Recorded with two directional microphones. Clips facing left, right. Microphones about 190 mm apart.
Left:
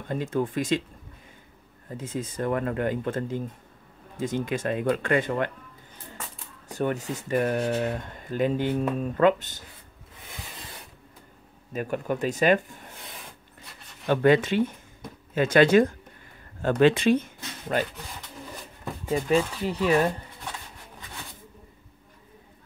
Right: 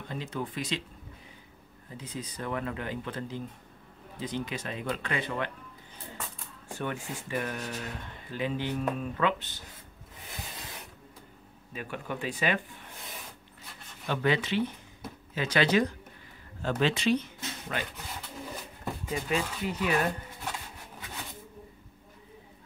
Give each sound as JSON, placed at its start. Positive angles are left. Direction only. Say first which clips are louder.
{"t": 0.1, "sound": "speech", "louder": "left 9 dB", "side_deg": 50}
{"t": 1.9, "sound": "speech", "louder": "left 7 dB", "side_deg": 50}
{"t": 6.7, "sound": "speech", "louder": "left 7 dB", "side_deg": 40}
{"t": 11.7, "sound": "speech", "louder": "left 8 dB", "side_deg": 45}
{"t": 14.0, "sound": "speech", "louder": "left 8 dB", "side_deg": 50}
{"t": 19.0, "sound": "speech", "louder": "left 8 dB", "side_deg": 40}